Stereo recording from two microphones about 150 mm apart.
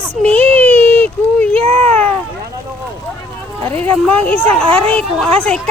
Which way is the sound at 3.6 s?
15° left (ahead or behind).